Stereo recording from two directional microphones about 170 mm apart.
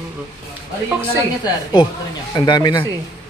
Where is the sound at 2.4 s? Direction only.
25° left (ahead or behind).